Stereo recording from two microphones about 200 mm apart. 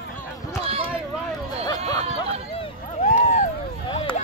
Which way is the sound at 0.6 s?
30° right (ahead or behind).